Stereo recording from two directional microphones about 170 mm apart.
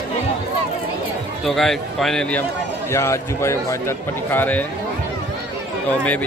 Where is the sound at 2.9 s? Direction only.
15° left (ahead or behind).